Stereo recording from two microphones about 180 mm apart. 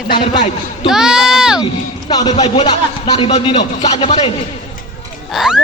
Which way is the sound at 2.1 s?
20° left (ahead or behind).